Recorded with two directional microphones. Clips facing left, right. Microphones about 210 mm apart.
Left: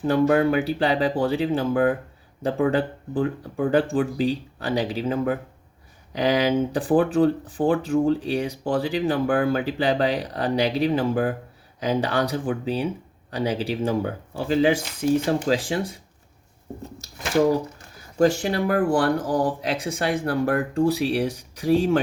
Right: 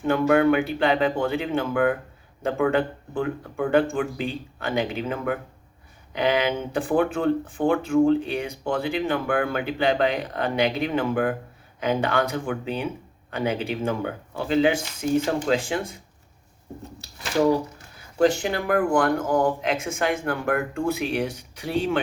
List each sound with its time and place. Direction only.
0.0 s speech: 35° left (ahead or behind)
18.2 s speech: 40° left (ahead or behind)